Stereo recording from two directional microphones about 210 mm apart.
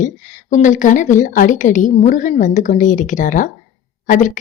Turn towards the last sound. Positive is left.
turn(degrees=35)  # may be behind; listen again after turning